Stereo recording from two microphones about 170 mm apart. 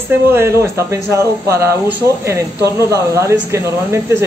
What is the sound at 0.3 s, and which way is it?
Speech, 15° right (ahead or behind).